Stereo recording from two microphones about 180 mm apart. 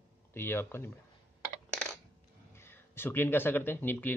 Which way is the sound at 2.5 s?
15° left (ahead or behind).